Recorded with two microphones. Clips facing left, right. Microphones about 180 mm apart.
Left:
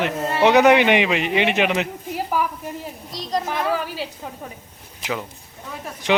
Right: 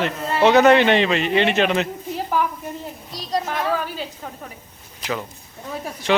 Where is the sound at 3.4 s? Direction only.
10° left (ahead or behind).